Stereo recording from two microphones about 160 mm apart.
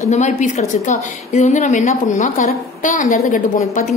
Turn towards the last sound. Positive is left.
turn(degrees=50)  # may be behind; listen again after turning